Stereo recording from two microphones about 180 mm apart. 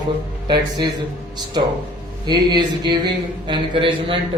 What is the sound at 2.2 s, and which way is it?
Speech, 25° right (ahead or behind).